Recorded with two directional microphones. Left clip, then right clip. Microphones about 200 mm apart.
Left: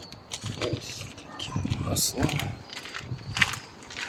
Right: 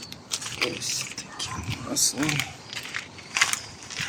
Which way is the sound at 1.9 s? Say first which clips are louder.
Right 4 dB; 55° left (ahead or behind).